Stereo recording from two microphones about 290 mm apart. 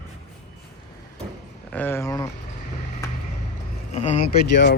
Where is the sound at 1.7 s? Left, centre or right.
Centre.